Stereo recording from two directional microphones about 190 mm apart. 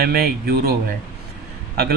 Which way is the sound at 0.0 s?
55° right (ahead or behind).